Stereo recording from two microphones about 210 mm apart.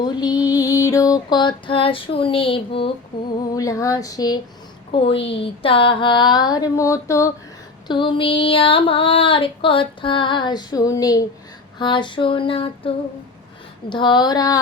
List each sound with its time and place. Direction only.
0.0 s female singing: 20° left (ahead or behind)
3.5 s a sound: 15° left (ahead or behind)
4.9 s female singing: 25° left (ahead or behind)
13.9 s female singing: 20° left (ahead or behind)